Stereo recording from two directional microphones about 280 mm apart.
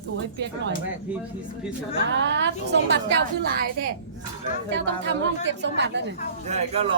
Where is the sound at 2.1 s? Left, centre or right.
Right.